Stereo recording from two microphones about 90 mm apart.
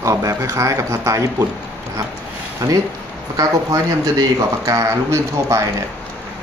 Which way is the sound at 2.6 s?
40° right (ahead or behind).